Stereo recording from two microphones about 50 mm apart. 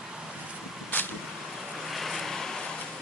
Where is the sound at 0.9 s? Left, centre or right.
Left.